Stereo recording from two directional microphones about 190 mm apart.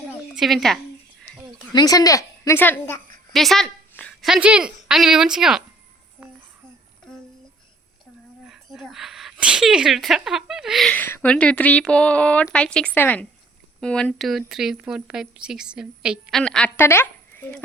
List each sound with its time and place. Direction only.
0.3 s speech: centre (ahead or behind)
1.7 s a woman's voice: 20° left (ahead or behind); by 5.6 s 5° right (ahead or behind)
8.4 s speech: centre (ahead or behind)